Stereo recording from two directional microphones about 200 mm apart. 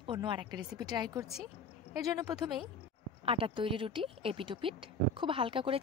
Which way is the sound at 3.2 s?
25° right (ahead or behind).